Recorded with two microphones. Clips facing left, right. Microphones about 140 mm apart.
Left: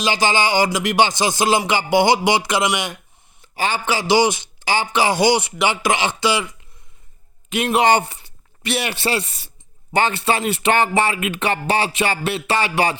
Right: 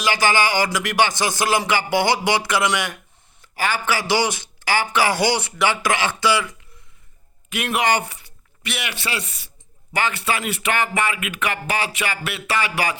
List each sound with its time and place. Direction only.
0.0 s speech: 20° left (ahead or behind)
7.5 s speech: 25° left (ahead or behind)